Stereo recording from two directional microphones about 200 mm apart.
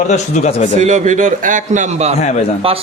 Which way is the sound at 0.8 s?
35° right (ahead or behind).